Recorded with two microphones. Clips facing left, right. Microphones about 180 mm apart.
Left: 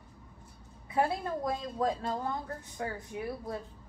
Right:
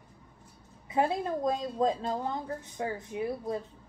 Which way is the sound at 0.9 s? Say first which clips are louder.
Right 2 dB; 20° right (ahead or behind).